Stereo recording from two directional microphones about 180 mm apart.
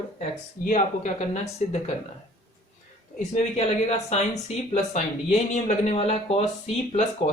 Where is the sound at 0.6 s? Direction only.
40° left (ahead or behind).